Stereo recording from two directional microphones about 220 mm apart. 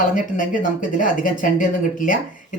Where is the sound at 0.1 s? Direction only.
35° left (ahead or behind).